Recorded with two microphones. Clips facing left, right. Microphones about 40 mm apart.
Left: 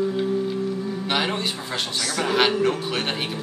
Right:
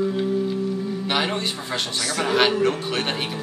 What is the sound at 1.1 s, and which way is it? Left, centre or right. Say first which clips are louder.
A man's voice: even; centre.